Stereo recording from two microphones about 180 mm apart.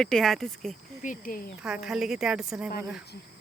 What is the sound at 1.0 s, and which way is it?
Speech, 50° left (ahead or behind).